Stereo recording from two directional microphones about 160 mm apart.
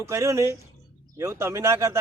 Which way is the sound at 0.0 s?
20° right (ahead or behind).